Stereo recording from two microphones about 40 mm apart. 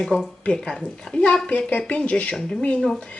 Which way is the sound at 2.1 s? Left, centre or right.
Left.